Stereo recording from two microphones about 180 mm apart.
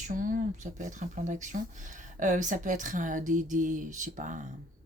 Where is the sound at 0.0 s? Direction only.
50° right (ahead or behind).